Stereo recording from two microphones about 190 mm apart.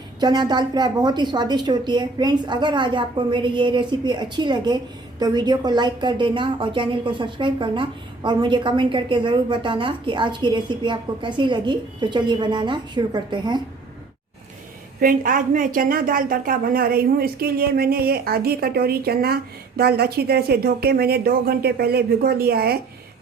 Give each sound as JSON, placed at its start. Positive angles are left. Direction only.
{"t": 0.2, "sound": "a woman's voice", "side_deg": -20}
{"t": 15.0, "sound": "a woman's voice", "side_deg": -45}